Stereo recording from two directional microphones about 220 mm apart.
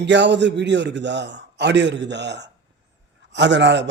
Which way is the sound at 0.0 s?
55° right (ahead or behind).